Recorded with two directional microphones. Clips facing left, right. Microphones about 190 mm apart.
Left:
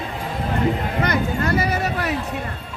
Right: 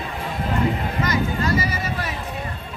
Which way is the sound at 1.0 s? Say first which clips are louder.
Left 1 dB; 60° left (ahead or behind).